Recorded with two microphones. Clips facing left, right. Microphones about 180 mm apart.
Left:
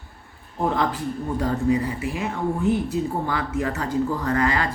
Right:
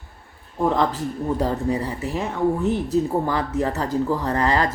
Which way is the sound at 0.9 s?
35° right (ahead or behind).